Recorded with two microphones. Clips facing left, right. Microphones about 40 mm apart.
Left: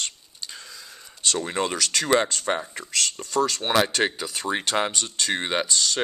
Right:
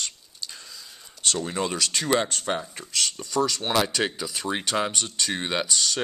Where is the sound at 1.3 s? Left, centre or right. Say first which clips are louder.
Left 2 dB; left.